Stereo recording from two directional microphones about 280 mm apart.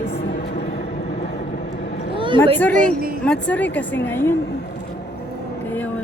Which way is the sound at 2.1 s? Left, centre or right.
Centre.